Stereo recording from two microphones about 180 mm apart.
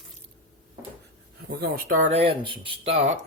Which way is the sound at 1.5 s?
60° right (ahead or behind).